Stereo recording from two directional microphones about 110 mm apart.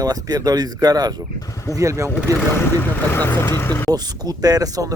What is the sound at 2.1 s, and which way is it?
Speech, 20° left (ahead or behind).